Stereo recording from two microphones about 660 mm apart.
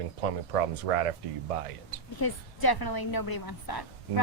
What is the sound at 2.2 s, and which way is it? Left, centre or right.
A woman's voice, left.